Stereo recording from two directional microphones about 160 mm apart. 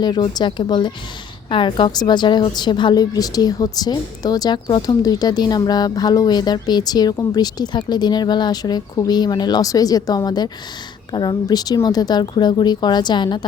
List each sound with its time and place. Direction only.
0.0 s a woman's voice: 25° left (ahead or behind)